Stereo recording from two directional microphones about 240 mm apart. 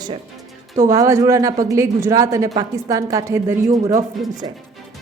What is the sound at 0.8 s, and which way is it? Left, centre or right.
A woman's voice, centre.